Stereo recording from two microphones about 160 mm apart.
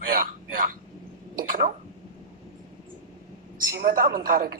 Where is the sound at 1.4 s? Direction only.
60° right (ahead or behind).